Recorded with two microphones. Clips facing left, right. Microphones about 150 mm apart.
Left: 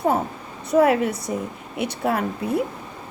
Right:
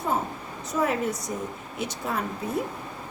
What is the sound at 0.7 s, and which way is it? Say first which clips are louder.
A woman's voice: left 8 dB; 65° left (ahead or behind).